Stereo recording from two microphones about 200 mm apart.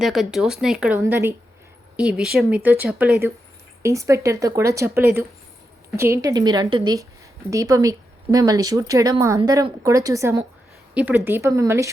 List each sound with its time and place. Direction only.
0.0 s speech: centre (ahead or behind)
0.9 s speech: 15° right (ahead or behind)
2.0 s a woman's voice: 5° right (ahead or behind)